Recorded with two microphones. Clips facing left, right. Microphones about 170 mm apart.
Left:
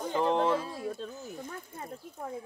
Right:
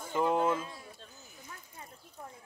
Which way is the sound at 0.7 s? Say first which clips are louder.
Left 15 dB; 90° left.